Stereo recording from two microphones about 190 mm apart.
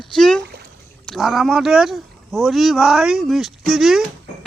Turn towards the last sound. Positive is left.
turn(degrees=0)  # may be behind; listen again after turning